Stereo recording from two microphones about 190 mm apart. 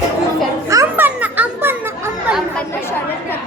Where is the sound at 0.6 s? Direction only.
15° right (ahead or behind).